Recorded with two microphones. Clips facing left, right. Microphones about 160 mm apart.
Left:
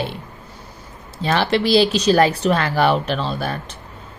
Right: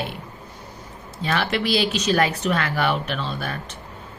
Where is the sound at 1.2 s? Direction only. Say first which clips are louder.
Left 5 dB; 30° left (ahead or behind).